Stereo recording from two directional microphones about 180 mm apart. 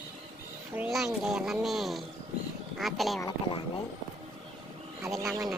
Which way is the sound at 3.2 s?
30° left (ahead or behind).